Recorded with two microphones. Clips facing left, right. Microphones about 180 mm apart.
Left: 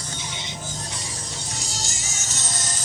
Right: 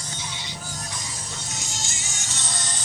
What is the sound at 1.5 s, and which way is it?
Music, 35° left (ahead or behind).